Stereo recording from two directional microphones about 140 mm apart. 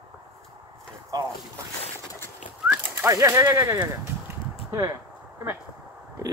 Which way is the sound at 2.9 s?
20° right (ahead or behind).